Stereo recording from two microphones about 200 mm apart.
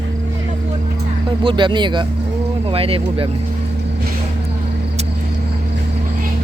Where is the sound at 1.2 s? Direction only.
25° right (ahead or behind).